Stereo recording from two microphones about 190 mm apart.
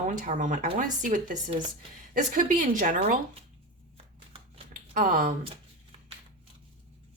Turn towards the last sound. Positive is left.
turn(degrees=-45)  # may be behind; listen again after turning